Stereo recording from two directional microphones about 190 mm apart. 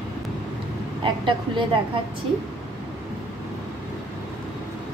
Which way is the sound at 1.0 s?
25° right (ahead or behind).